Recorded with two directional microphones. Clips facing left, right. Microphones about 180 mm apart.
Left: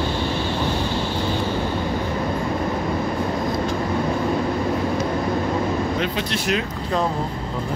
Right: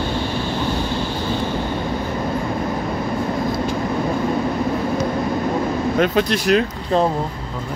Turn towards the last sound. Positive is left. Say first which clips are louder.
# right 6 dB
turn(degrees=-40)  # may be behind; listen again after turning